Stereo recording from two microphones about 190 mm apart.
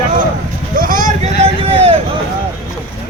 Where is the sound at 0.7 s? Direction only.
45° right (ahead or behind).